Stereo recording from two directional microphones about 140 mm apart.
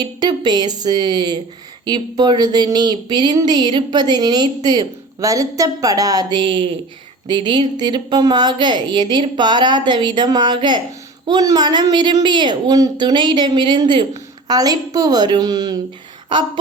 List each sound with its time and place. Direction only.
0.0 s a woman's voice: 30° right (ahead or behind)